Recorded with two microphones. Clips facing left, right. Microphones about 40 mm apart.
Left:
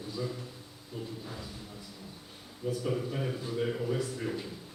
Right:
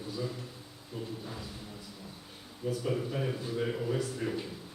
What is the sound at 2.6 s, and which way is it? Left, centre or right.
A man's voice, centre.